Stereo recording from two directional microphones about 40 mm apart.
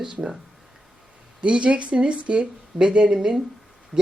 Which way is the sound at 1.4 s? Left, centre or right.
Right.